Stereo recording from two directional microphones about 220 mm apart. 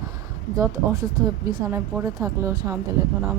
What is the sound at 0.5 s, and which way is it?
A woman's voice, 15° right (ahead or behind).